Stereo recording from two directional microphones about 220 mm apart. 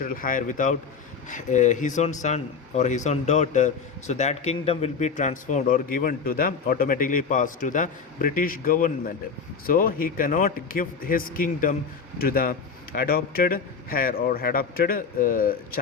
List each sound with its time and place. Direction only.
0.0 s a man's voice: 40° left (ahead or behind)